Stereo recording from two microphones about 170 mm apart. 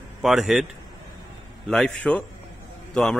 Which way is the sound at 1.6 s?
5° left (ahead or behind).